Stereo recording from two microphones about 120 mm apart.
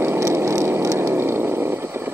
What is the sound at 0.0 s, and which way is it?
Vehicle, 20° right (ahead or behind).